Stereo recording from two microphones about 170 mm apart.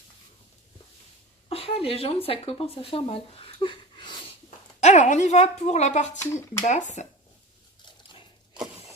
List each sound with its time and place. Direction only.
1.5 s speech: 35° left (ahead or behind)
4.8 s speech: 45° left (ahead or behind)
6.3 s speech: 15° left (ahead or behind)
6.7 s speech: 45° left (ahead or behind)